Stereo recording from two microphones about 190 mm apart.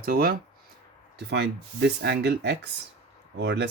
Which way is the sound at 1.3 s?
60° right (ahead or behind).